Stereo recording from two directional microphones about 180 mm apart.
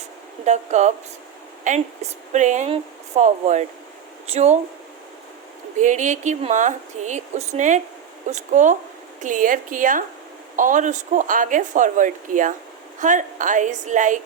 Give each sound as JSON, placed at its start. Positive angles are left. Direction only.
{"t": 0.4, "sound": "speech", "side_deg": -40}
{"t": 5.8, "sound": "speech", "side_deg": -45}